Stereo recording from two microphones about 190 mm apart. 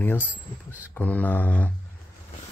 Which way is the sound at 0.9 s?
10° left (ahead or behind).